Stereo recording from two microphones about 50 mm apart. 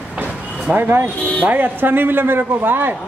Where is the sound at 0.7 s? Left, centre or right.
Right.